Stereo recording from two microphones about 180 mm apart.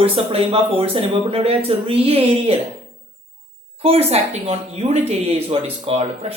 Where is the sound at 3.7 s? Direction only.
35° right (ahead or behind).